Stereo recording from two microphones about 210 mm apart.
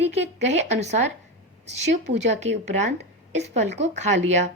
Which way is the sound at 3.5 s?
35° right (ahead or behind).